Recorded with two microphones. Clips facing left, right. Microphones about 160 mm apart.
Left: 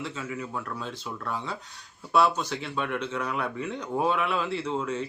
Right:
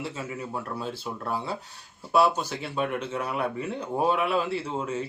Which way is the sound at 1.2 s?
35° right (ahead or behind).